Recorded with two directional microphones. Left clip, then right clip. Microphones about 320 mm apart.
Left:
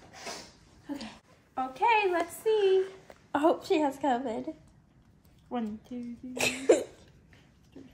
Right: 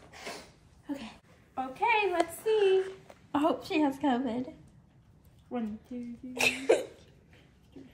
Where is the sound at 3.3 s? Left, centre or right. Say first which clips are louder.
Left 3 dB; left.